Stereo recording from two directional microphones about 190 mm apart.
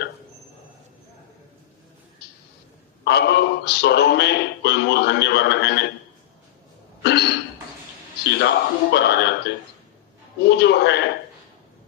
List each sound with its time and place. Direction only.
3.1 s a man's voice: 60° left (ahead or behind)
7.0 s cough: 60° left (ahead or behind)
8.4 s a man's voice: 60° left (ahead or behind)
10.4 s a man's voice: 60° left (ahead or behind)